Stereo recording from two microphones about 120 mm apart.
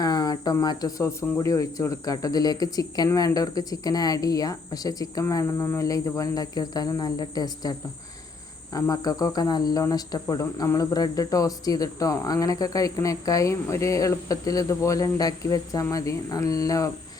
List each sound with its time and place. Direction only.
0.0 s speech: 35° left (ahead or behind)